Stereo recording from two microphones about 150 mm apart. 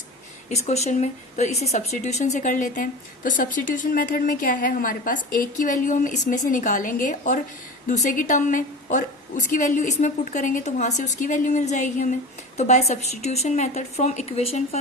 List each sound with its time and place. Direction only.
0.5 s a woman's voice: 45° left (ahead or behind)